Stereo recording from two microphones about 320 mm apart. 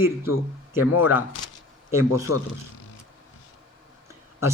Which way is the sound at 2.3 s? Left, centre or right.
Left.